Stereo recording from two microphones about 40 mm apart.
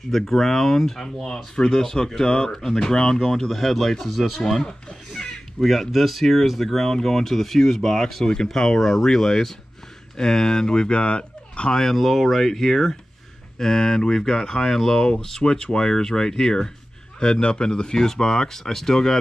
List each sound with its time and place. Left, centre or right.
0.1 s speech: centre
5.2 s crow: centre
5.9 s speech: centre; by 11.7 s left
11.7 s speech: centre